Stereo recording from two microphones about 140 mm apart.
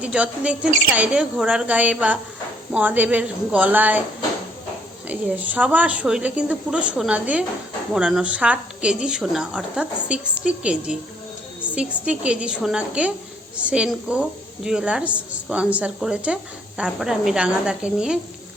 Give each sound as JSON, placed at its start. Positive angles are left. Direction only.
{"t": 0.0, "sound": "a woman's voice", "side_deg": -10}
{"t": 5.0, "sound": "a woman's voice", "side_deg": -10}